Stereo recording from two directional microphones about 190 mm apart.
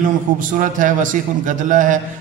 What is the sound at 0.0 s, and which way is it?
A man's voice, 45° right (ahead or behind).